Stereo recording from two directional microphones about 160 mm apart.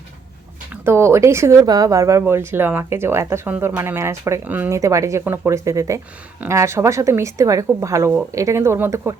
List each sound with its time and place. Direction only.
0.7 s a woman's voice: 15° right (ahead or behind)